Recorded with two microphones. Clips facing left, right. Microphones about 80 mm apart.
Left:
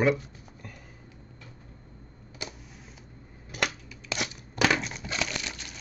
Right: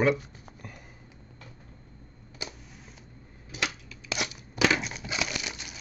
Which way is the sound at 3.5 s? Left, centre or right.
Left.